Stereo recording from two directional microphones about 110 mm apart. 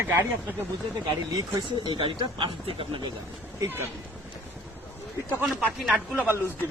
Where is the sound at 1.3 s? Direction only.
45° right (ahead or behind).